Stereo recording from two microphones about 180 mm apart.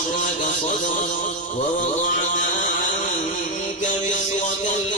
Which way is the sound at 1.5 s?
45° left (ahead or behind).